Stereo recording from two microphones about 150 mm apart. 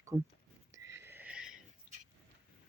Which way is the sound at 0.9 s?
15° right (ahead or behind).